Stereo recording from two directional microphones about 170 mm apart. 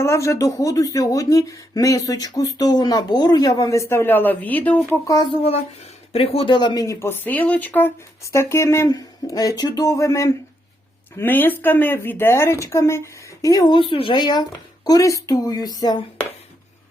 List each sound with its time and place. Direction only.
0.0 s speech: 15° left (ahead or behind)
5.0 s speech: 25° left (ahead or behind)